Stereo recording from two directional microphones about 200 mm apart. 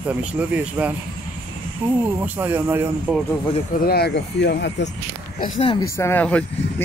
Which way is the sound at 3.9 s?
55° left (ahead or behind).